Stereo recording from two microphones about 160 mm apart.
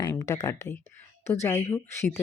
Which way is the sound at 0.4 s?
20° left (ahead or behind).